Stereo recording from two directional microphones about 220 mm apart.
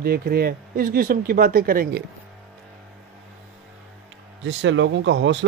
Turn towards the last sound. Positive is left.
turn(degrees=-55)  # may be behind; listen again after turning